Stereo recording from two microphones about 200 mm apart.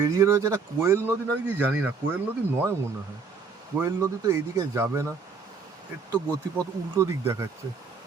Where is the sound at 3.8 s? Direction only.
15° right (ahead or behind).